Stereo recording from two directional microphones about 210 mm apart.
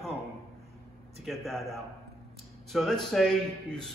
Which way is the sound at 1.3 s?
Centre (ahead or behind).